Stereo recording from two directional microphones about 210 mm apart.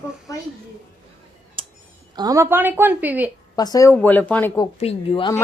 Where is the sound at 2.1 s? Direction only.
15° right (ahead or behind).